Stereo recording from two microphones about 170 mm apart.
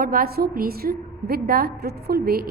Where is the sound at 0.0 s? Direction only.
60° right (ahead or behind).